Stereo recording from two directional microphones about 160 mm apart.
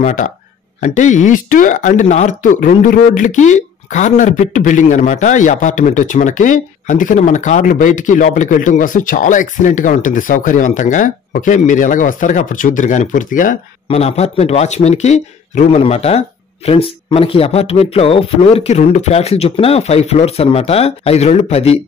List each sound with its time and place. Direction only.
0.0 s speech: 50° left (ahead or behind)
13.8 s speech: 40° left (ahead or behind)